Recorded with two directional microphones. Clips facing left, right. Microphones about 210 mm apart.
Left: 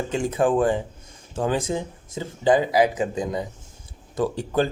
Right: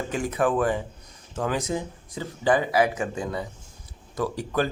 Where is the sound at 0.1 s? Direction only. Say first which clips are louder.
Left 3 dB; 25° left (ahead or behind).